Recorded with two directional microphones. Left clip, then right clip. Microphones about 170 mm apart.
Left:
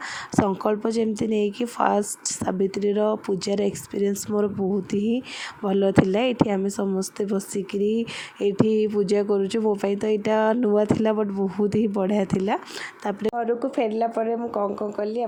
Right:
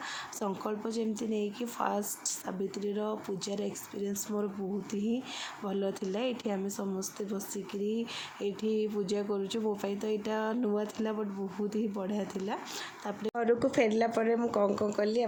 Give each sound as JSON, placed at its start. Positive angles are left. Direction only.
{"t": 0.3, "sound": "speech", "side_deg": 45}
{"t": 13.3, "sound": "speech", "side_deg": 5}